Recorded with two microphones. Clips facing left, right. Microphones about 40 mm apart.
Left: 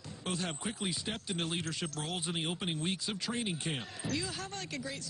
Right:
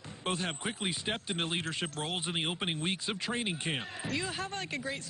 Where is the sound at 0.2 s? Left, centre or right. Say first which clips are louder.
Right 3 dB; right.